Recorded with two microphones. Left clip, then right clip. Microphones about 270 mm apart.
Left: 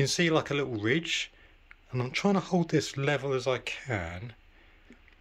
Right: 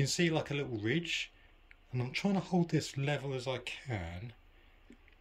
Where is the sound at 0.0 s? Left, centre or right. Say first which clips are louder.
Left 6 dB; centre.